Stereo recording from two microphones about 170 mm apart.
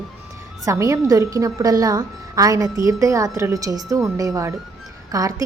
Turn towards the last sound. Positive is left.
turn(degrees=-20)  # may be behind; listen again after turning